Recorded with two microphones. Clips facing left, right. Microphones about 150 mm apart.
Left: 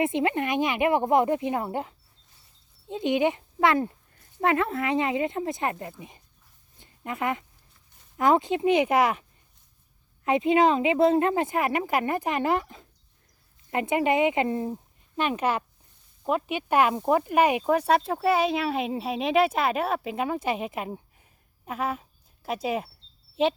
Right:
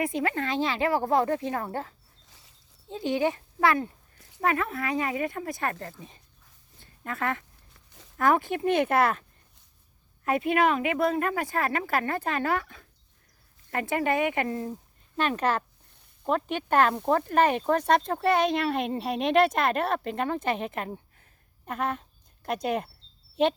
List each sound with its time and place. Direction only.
0.0 s speech: 20° left (ahead or behind)
2.2 s dog: 90° right
2.9 s a woman's voice: 20° left (ahead or behind)
6.7 s a sound: 15° left (ahead or behind)
7.7 s a sound: 90° right
8.2 s speech: 20° left (ahead or behind)
10.2 s a woman's voice: 20° left (ahead or behind)
15.1 s speech: 10° left (ahead or behind)